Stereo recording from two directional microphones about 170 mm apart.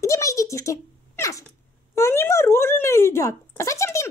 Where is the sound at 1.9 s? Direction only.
15° left (ahead or behind).